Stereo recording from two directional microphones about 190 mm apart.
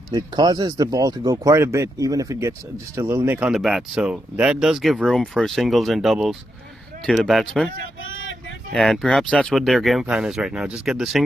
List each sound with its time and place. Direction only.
0.1 s speech: 20° right (ahead or behind); by 7.7 s centre (ahead or behind)
8.0 s vehicle: 90° left
8.7 s speech: centre (ahead or behind)